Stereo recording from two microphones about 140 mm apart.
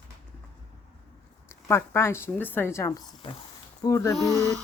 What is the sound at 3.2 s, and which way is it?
Speech, 40° left (ahead or behind).